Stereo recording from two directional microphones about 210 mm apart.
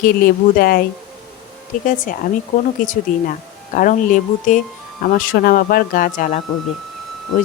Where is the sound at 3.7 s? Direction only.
40° left (ahead or behind).